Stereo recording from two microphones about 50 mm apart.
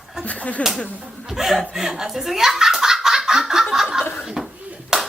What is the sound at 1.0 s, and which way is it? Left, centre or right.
Speech, centre.